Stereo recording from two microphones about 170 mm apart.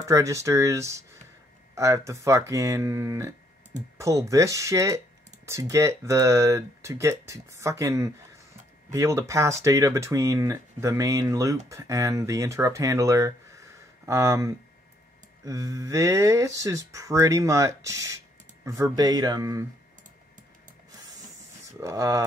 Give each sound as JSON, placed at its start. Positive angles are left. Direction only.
{"t": 0.0, "sound": "speech", "side_deg": -20}
{"t": 21.7, "sound": "speech", "side_deg": -20}